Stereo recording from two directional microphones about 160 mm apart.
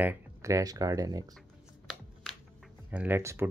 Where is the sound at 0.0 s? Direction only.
15° right (ahead or behind).